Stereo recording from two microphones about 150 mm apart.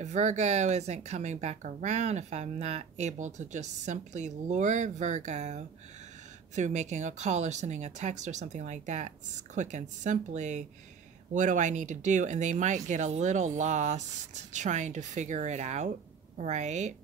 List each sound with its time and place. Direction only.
0.0 s a woman's voice: 50° right (ahead or behind)